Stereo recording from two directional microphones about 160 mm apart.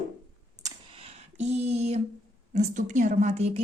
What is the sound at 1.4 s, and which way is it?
A woman's voice, 40° right (ahead or behind).